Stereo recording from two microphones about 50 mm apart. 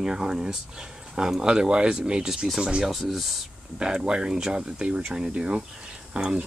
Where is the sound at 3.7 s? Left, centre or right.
Centre.